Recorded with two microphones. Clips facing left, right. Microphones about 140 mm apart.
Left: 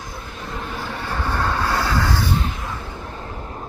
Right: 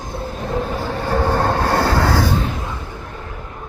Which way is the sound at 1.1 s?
45° right (ahead or behind).